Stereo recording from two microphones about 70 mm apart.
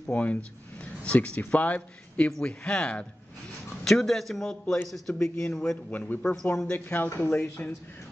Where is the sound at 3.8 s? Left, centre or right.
Centre.